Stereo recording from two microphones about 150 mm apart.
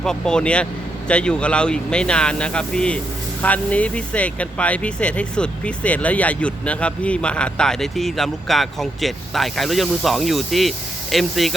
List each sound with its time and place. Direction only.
0.0 s speech: 5° left (ahead or behind)